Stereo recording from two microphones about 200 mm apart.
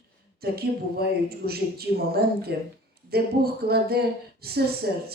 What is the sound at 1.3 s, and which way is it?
Speech, 50° right (ahead or behind).